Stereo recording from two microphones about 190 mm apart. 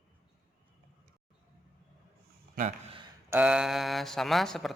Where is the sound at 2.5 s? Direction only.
40° right (ahead or behind).